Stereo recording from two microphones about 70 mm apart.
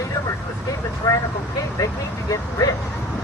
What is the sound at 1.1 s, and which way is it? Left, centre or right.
Speech, left.